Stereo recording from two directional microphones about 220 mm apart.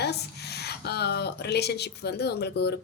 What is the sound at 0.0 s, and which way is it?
Speech, 50° left (ahead or behind).